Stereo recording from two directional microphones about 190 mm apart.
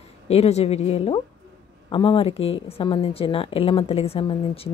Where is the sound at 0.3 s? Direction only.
35° left (ahead or behind).